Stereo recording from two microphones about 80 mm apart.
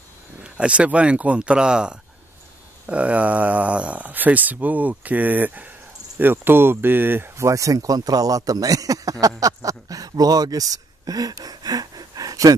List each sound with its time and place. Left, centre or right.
0.4 s speech: centre; by 12.5 s right